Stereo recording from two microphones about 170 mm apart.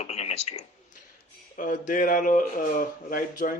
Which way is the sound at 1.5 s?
50° left (ahead or behind).